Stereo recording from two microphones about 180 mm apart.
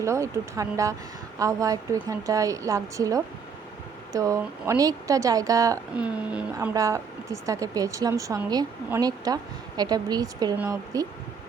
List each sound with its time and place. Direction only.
0.0 s speech: 15° right (ahead or behind)
6.0 s speech: 5° right (ahead or behind)
6.5 s speech: 20° right (ahead or behind)